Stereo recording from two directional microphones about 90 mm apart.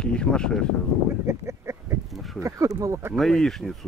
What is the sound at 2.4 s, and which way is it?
Speech, 35° right (ahead or behind).